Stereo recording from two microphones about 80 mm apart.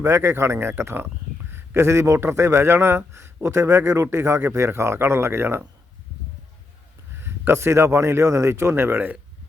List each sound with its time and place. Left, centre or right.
0.0 s speech: right
7.2 s speech: right